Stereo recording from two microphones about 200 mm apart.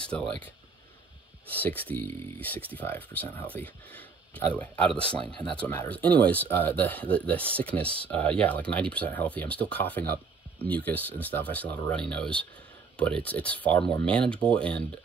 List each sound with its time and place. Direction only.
0.0 s speech: 5° left (ahead or behind)
1.5 s speech: 10° left (ahead or behind)